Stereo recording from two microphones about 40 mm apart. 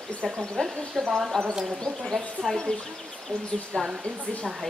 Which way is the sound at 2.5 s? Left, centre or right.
Centre.